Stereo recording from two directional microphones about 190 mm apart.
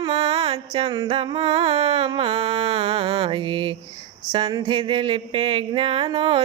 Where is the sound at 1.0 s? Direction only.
30° right (ahead or behind).